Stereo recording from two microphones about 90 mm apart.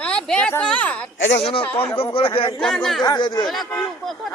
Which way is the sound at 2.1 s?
80° left.